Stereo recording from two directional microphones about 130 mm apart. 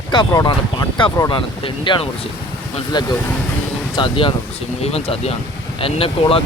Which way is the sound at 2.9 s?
35° left (ahead or behind).